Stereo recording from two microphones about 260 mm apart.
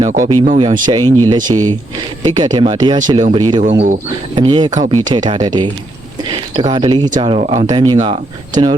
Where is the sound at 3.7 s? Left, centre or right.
Right.